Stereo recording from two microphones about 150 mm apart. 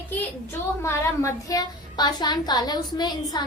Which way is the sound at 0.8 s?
20° left (ahead or behind).